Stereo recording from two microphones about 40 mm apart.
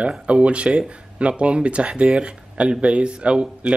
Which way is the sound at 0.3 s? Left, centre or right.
Right.